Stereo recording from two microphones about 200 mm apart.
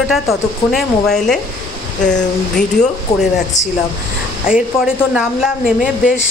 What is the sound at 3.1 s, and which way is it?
Speech, 15° left (ahead or behind).